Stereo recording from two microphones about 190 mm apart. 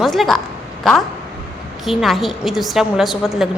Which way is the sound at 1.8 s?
Centre (ahead or behind).